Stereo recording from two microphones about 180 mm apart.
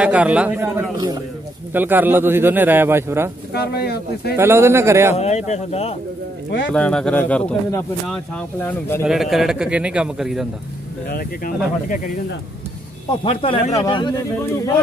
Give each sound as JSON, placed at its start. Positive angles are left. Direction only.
{"t": 0.0, "sound": "speech", "side_deg": -5}
{"t": 0.9, "sound": "a man's voice", "side_deg": -20}
{"t": 1.7, "sound": "speech", "side_deg": -10}
{"t": 3.5, "sound": "speech", "side_deg": 60}
{"t": 4.4, "sound": "speech", "side_deg": -15}
{"t": 5.1, "sound": "speech", "side_deg": 40}
{"t": 6.7, "sound": "speech", "side_deg": 5}
{"t": 11.1, "sound": "speech", "side_deg": 50}
{"t": 13.2, "sound": "speech", "side_deg": 30}